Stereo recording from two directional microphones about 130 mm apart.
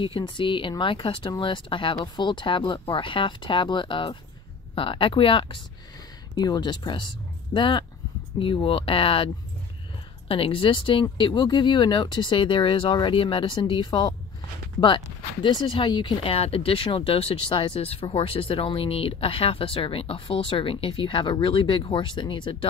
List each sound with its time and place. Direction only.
0.0 s speech: 40° left (ahead or behind)
15.4 s speech: 40° left (ahead or behind)
16.3 s speech: 50° left (ahead or behind)